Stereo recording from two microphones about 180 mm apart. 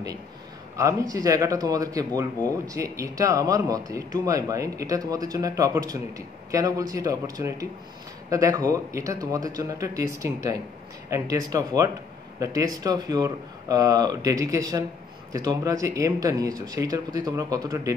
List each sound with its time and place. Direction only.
0.7 s speech: 15° right (ahead or behind)